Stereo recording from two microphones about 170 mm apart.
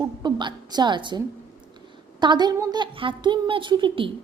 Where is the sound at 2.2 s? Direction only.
25° right (ahead or behind).